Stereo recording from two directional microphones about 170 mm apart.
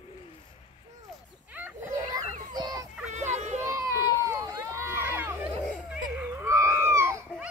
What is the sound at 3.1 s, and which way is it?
Children playing, 45° right (ahead or behind).